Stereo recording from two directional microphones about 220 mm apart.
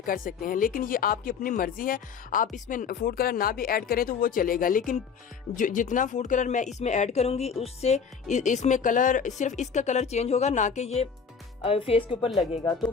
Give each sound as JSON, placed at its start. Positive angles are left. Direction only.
{"t": 0.0, "sound": "speech", "side_deg": 40}